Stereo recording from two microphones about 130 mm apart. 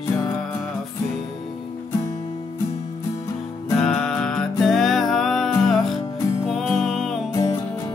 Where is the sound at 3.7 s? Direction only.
5° left (ahead or behind).